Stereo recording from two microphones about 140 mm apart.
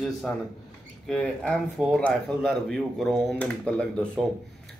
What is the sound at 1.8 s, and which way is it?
Speech, 5° right (ahead or behind).